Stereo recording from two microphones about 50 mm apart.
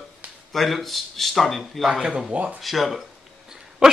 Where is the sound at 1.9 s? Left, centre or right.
Centre.